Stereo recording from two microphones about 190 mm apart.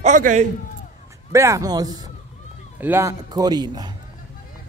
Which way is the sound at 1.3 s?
15° right (ahead or behind).